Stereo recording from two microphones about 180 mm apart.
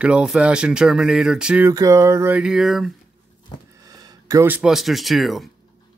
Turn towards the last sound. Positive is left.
turn(degrees=0)  # may be behind; listen again after turning